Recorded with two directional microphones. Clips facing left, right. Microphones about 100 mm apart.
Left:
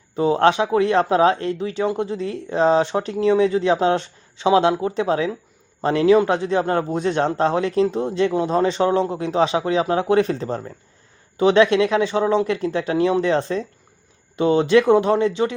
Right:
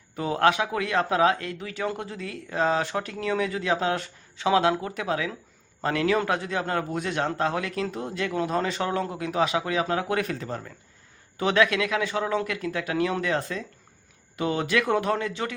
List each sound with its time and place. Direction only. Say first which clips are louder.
0.2 s speech: left 6 dB; 25° left (ahead or behind)